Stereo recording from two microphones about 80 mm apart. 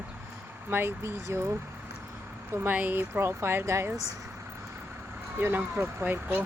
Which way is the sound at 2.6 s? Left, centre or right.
Right.